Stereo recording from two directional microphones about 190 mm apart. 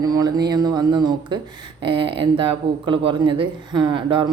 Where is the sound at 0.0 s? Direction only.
20° right (ahead or behind).